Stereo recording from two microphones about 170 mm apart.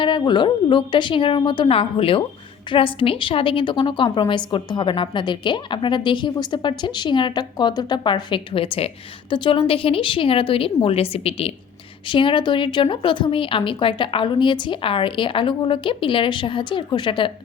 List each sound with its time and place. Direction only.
0.0 s a woman's voice: 25° left (ahead or behind)